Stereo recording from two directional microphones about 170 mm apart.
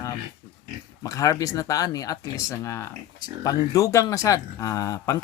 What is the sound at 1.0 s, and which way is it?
Speech, 20° left (ahead or behind).